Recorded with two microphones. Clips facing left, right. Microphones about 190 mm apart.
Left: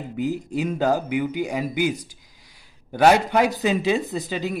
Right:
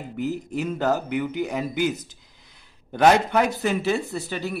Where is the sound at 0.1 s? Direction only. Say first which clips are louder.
Left 2 dB; 15° left (ahead or behind).